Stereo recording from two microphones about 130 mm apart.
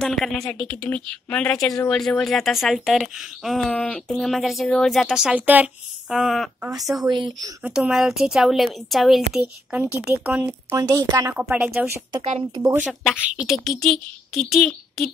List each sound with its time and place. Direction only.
0.0 s a woman's voice: 5° left (ahead or behind)
7.0 s speech: 35° right (ahead or behind)
7.6 s speech: 5° right (ahead or behind)
9.4 s speech: 10° right (ahead or behind)
10.8 s a woman's voice: 25° right (ahead or behind)
11.3 s speech: 10° right (ahead or behind)
12.2 s speech: 50° right (ahead or behind)
12.8 s speech: 5° right (ahead or behind)
13.7 s speech: 5° left (ahead or behind)